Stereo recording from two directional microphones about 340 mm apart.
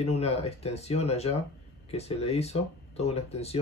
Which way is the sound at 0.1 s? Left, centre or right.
Centre.